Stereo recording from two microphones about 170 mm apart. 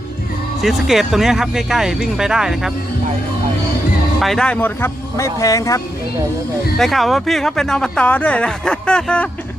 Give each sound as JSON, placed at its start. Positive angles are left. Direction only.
{"t": 0.6, "sound": "speech", "side_deg": 0}
{"t": 4.2, "sound": "speech", "side_deg": 5}
{"t": 6.7, "sound": "speech", "side_deg": 0}